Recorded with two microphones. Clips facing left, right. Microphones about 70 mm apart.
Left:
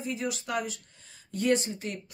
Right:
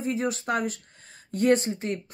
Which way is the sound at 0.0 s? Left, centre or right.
Right.